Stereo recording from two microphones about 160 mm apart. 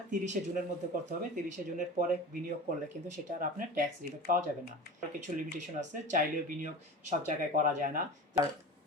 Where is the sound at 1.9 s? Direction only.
55° right (ahead or behind).